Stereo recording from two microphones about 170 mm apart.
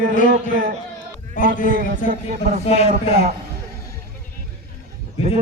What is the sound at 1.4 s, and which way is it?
Speech, 55° left (ahead or behind).